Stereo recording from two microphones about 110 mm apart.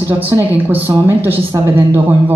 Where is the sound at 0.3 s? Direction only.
20° right (ahead or behind).